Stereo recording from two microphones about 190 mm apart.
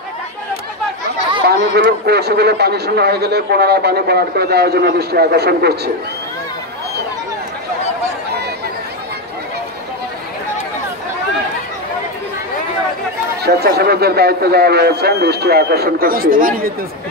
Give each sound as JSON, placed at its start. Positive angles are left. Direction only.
{"t": 1.5, "sound": "a man's voice", "side_deg": -55}
{"t": 13.4, "sound": "a man's voice", "side_deg": -60}